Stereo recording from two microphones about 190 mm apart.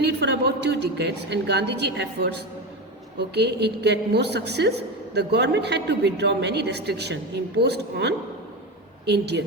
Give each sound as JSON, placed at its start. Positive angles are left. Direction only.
{"t": 0.2, "sound": "a woman's voice", "side_deg": -60}